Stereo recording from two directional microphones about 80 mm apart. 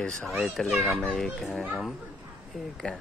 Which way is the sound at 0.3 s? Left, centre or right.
Centre.